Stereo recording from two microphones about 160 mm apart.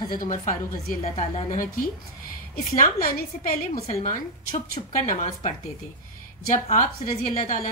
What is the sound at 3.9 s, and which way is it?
Speech, 40° left (ahead or behind).